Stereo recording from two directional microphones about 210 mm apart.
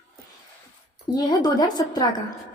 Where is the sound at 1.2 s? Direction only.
20° left (ahead or behind).